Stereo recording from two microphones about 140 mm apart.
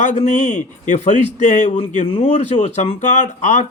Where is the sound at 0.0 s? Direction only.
60° left (ahead or behind).